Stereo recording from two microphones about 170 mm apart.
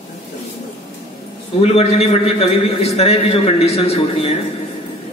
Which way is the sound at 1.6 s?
35° left (ahead or behind).